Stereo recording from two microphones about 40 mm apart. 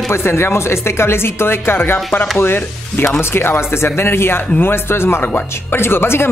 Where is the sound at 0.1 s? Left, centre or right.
Left.